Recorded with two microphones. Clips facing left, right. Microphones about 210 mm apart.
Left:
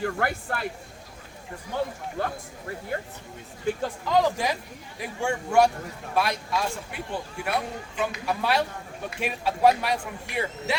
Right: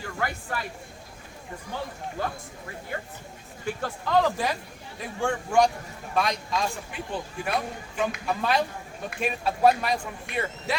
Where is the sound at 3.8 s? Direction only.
15° left (ahead or behind).